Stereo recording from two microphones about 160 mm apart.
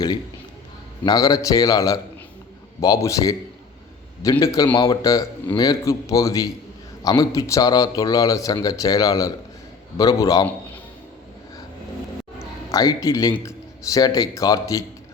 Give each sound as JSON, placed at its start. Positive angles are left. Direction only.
{"t": 1.0, "sound": "speech", "side_deg": 25}
{"t": 12.7, "sound": "speech", "side_deg": 20}